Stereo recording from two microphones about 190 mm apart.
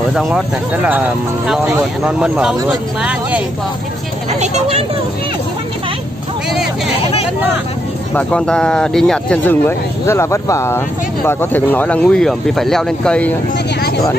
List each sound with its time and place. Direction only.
0.1 s speech: centre (ahead or behind)
1.5 s speech: 5° right (ahead or behind)
4.3 s speech: 35° right (ahead or behind)
8.1 s speech: 5° left (ahead or behind)